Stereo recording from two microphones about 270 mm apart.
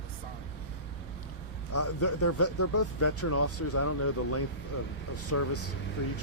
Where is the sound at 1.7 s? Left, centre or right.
Left.